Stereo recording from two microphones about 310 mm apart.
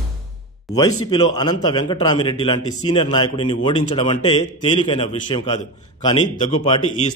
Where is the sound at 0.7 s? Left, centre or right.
Centre.